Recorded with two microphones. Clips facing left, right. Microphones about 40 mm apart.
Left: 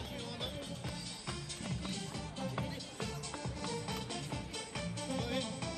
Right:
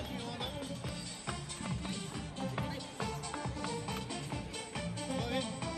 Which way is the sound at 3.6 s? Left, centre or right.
Right.